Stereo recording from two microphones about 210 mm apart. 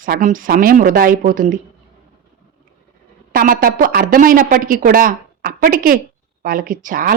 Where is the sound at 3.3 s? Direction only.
40° right (ahead or behind).